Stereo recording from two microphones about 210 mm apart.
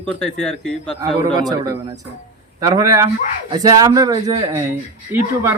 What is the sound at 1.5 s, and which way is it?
Speech, 15° right (ahead or behind).